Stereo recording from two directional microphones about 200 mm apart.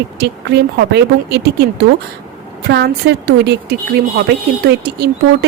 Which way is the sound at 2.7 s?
55° right (ahead or behind).